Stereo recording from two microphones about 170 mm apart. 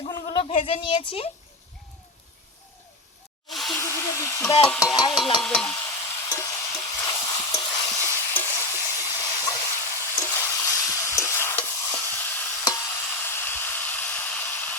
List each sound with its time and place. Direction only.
0.1 s speech: 30° left (ahead or behind)
3.7 s sizzle: 15° left (ahead or behind)
4.8 s a sound: 20° left (ahead or behind)
5.4 s stir: 5° left (ahead or behind)
5.7 s stir: 20° left (ahead or behind)
10.0 s frying: 15° left (ahead or behind)